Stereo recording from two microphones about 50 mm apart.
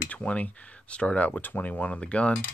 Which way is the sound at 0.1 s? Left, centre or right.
Left.